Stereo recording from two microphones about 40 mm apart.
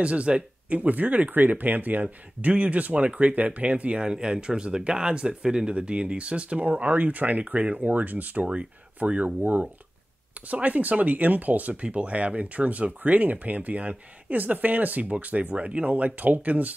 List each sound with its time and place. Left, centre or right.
0.0 s speech: right
0.7 s speech: right; by 5.7 s centre
5.7 s speech: right
6.6 s speech: right